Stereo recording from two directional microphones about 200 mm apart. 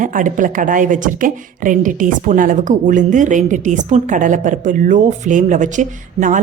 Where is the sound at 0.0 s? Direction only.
40° right (ahead or behind).